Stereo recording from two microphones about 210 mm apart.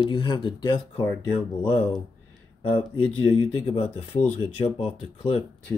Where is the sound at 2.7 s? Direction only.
25° left (ahead or behind).